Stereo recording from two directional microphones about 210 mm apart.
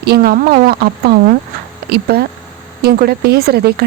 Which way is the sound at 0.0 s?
50° right (ahead or behind).